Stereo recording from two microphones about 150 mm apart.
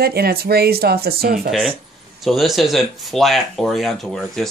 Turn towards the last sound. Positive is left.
turn(degrees=5)  # may be behind; listen again after turning